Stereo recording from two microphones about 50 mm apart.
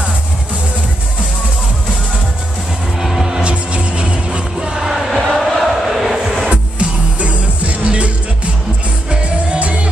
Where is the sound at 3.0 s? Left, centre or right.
Centre.